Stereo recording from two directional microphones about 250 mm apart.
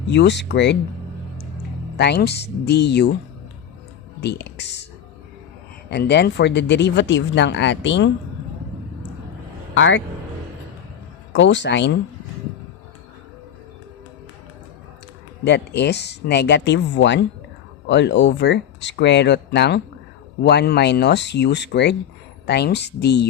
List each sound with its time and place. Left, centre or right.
0.1 s speech: left
2.0 s speech: left
4.2 s speech: left
5.9 s speech: left
9.7 s speech: left
11.3 s speech: left
15.4 s speech: left